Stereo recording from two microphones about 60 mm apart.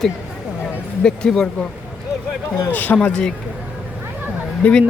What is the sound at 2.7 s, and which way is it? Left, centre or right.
Speech, left.